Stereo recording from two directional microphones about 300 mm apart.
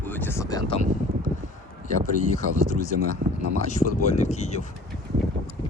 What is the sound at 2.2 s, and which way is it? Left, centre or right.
Speech, left.